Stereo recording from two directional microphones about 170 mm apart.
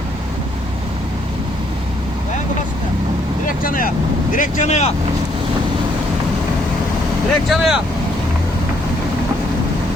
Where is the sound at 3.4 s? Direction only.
55° left (ahead or behind).